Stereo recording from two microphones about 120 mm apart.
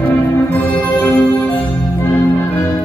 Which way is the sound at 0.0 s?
15° left (ahead or behind).